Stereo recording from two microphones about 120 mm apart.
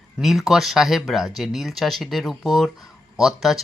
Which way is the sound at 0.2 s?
Centre (ahead or behind).